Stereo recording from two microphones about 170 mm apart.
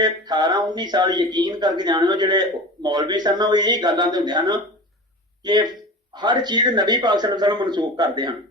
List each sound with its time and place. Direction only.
0.0 s speech: 25° right (ahead or behind)